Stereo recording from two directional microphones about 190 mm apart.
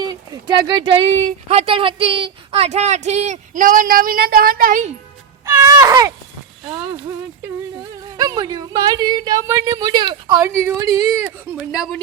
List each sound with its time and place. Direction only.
0.0 s speech: 20° right (ahead or behind)
1.1 s speech: 35° right (ahead or behind)
5.5 s speech: 15° right (ahead or behind)
8.1 s a woman's voice: 20° right (ahead or behind)
11.5 s speech: 5° right (ahead or behind)